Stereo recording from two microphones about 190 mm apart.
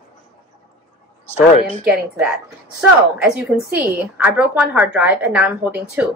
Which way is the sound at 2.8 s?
5° right (ahead or behind).